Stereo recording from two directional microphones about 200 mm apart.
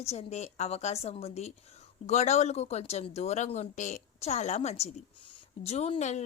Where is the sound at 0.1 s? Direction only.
35° left (ahead or behind).